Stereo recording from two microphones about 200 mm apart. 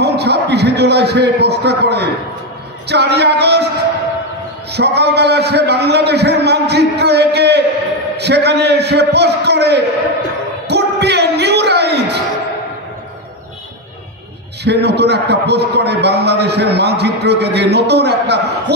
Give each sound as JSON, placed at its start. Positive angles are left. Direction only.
{"t": 0.0, "sound": "a man's voice", "side_deg": -55}
{"t": 4.7, "sound": "a man's voice", "side_deg": -55}
{"t": 10.7, "sound": "a sound", "side_deg": -55}
{"t": 14.6, "sound": "a man's voice", "side_deg": -55}